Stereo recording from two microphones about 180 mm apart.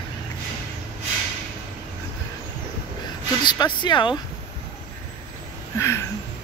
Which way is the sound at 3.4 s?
25° left (ahead or behind).